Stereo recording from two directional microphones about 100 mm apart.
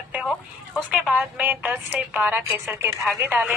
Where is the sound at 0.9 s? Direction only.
15° right (ahead or behind).